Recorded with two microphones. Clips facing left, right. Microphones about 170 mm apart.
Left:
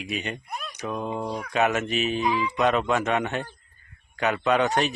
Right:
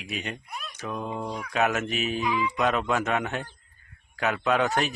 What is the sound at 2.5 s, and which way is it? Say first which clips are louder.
Speech: left 4 dB; centre (ahead or behind).